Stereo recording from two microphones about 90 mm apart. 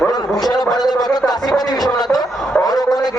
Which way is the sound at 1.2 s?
45° left (ahead or behind).